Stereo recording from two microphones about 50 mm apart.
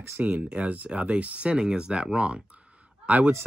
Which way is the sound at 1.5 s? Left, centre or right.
Centre.